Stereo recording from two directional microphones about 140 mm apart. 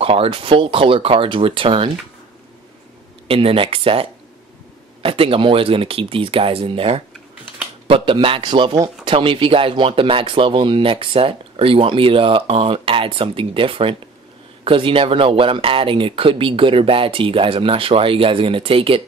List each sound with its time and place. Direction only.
0.0 s speech: 40° right (ahead or behind)
3.3 s speech: 40° right (ahead or behind)